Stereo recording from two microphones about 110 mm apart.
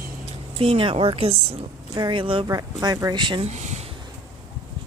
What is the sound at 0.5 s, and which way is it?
Speech, 55° right (ahead or behind).